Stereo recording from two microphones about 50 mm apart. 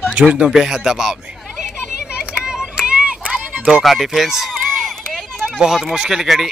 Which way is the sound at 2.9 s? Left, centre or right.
Right.